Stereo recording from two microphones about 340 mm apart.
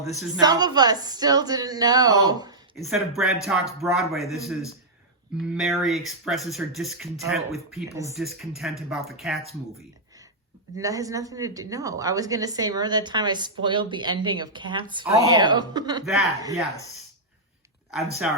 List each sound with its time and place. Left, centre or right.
0.3 s a woman's voice: centre
2.7 s speech: centre
5.5 s speech: centre
10.8 s a woman's voice: centre
16.0 s a woman's voice: centre
17.9 s speech: centre